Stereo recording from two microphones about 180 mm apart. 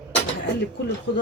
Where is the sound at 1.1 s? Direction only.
90° left.